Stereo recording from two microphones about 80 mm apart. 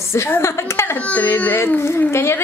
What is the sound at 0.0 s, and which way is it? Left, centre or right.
Speech, left.